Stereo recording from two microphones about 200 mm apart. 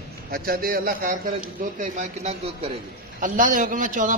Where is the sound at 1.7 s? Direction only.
35° right (ahead or behind).